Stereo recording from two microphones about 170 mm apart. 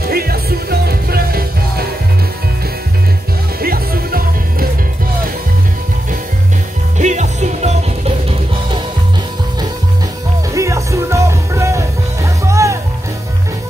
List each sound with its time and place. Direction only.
0.1 s music: 65° right (ahead or behind)
3.6 s music: 60° right (ahead or behind)
7.0 s music: 45° right (ahead or behind)
10.5 s music: 20° right (ahead or behind)